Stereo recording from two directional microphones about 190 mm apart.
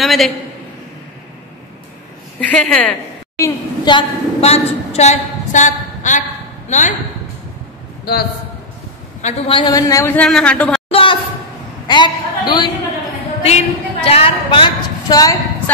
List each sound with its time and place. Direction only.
0.0 s a woman's voice: centre (ahead or behind)
2.5 s a woman's voice: 5° left (ahead or behind)
3.3 s a woman's voice: 20° left (ahead or behind); by 6.8 s 40° left (ahead or behind)
8.1 s a man's voice: 55° left (ahead or behind)
9.2 s a man's voice: 25° left (ahead or behind); by 10.8 s 5° left (ahead or behind)
10.9 s a sound: 30° left (ahead or behind)
13.4 s a woman's voice: 35° left (ahead or behind)